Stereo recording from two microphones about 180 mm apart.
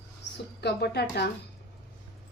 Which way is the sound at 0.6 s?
65° left (ahead or behind).